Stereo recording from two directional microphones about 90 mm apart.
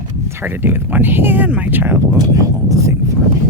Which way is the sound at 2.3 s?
40° right (ahead or behind).